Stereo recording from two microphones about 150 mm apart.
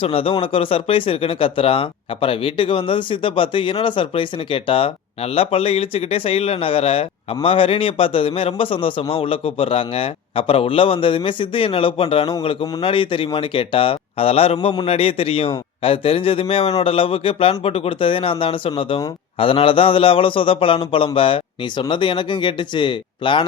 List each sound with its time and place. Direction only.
0.0 s speech: 40° left (ahead or behind)